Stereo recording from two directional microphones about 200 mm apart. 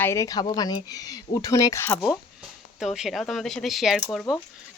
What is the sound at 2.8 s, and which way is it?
Speech, centre (ahead or behind).